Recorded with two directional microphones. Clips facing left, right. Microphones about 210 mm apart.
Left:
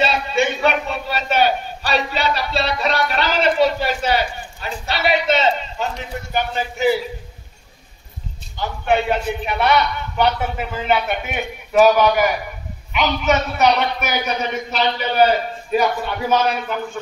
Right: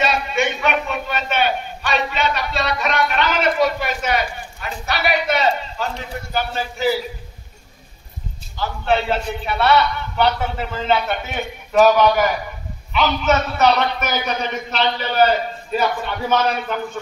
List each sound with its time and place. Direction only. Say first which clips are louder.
0.0 s a man's voice: left 1 dB; 30° left (ahead or behind)
8.5 s a man's voice: left 1 dB; 15° left (ahead or behind)